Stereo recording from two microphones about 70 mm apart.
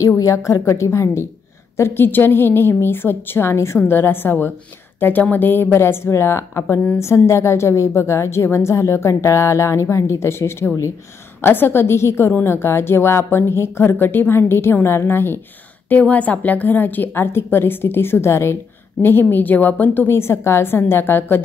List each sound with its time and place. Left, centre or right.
0.2 s a woman's voice: left
1.8 s a woman's voice: left
15.9 s a woman's voice: left
19.3 s a woman's voice: left